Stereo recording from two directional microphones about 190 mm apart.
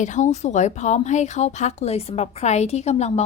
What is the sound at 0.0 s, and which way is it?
A woman's voice, 40° left (ahead or behind).